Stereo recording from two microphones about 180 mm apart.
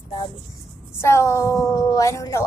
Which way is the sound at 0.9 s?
15° left (ahead or behind).